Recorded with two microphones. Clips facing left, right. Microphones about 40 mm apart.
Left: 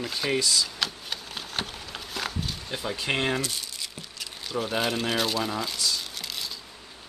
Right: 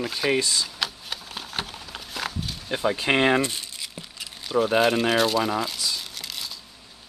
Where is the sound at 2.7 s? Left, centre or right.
Right.